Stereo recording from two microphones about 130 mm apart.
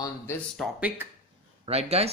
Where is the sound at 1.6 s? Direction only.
50° right (ahead or behind).